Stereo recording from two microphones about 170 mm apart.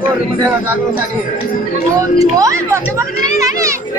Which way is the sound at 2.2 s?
20° right (ahead or behind).